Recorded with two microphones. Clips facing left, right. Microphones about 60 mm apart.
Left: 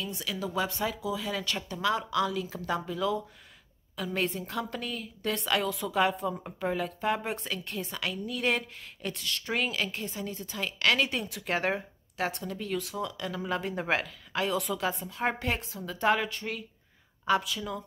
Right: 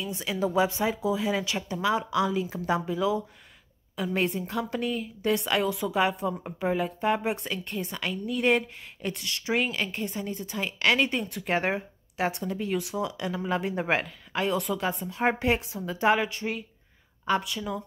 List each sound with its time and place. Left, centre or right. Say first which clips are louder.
0.1 s speech: right 6 dB; right
1.4 s a woman's voice: right 2 dB; centre